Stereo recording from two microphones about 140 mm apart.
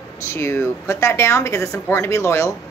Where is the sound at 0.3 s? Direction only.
20° left (ahead or behind).